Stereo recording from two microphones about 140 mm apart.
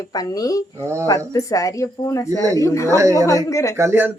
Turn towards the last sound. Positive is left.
turn(degrees=-15)  # may be behind; listen again after turning